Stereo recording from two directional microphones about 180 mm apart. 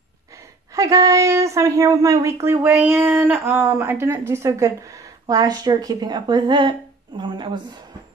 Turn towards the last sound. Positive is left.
turn(degrees=-25)  # may be behind; listen again after turning